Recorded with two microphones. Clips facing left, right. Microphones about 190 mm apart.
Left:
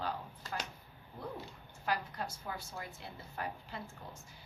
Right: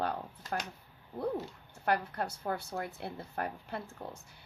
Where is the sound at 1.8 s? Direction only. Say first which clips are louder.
Right 5 dB; 60° right (ahead or behind).